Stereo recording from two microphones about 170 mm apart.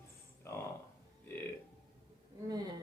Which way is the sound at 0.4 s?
15° left (ahead or behind).